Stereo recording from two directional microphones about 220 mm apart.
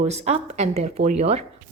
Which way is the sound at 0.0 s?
30° right (ahead or behind).